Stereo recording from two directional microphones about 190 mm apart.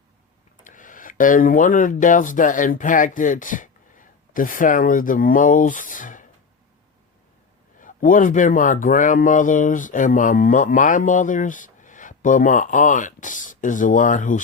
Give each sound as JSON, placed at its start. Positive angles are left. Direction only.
{"t": 0.6, "sound": "speech", "side_deg": 45}
{"t": 7.8, "sound": "speech", "side_deg": 45}